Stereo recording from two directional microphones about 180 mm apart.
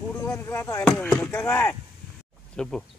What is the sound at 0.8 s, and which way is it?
Speech, 5° left (ahead or behind).